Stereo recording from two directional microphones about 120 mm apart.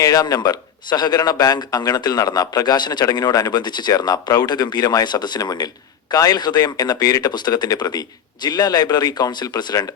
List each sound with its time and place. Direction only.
0.0 s a man's voice: 30° left (ahead or behind)